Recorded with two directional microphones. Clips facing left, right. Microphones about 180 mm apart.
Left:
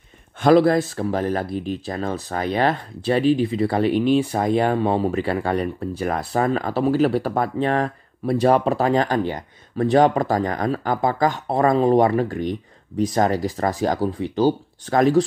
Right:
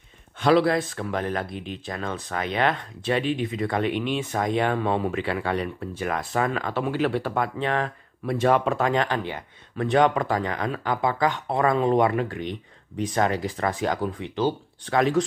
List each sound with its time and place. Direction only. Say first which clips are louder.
0.4 s speech: left 5 dB; 45° left (ahead or behind)